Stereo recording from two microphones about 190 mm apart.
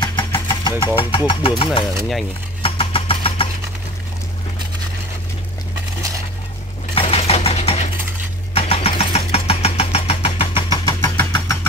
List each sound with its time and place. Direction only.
0.0 s vehicle: 25° left (ahead or behind)
0.3 s speech: 15° left (ahead or behind)
2.6 s vehicle: 30° left (ahead or behind)
7.0 s a sound: 30° left (ahead or behind)
8.5 s engine: 30° left (ahead or behind); by 11.5 s 15° left (ahead or behind)